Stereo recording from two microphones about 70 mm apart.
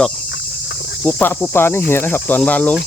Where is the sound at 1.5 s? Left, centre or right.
Left; by 2.8 s centre.